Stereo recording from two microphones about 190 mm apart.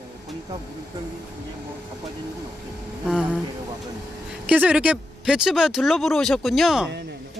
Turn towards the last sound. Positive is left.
turn(degrees=0)  # may be behind; listen again after turning